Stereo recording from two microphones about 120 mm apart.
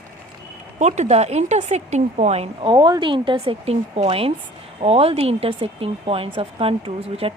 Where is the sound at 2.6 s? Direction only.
40° right (ahead or behind).